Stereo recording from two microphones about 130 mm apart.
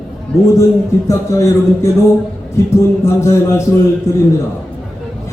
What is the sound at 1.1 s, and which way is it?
Speech, 25° left (ahead or behind).